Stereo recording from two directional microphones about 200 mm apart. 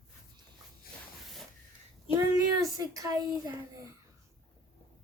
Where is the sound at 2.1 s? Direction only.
15° right (ahead or behind).